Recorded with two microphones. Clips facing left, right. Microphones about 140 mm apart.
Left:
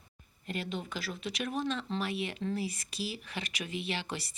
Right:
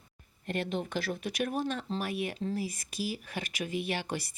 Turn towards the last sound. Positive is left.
turn(degrees=-50)  # may be behind; listen again after turning